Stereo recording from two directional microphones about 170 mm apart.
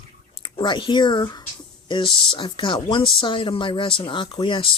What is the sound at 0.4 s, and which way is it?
Speech, 30° left (ahead or behind).